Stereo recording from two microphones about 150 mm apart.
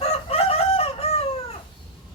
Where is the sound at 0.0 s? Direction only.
45° left (ahead or behind).